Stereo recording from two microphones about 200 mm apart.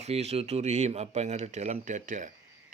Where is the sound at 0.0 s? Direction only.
30° right (ahead or behind).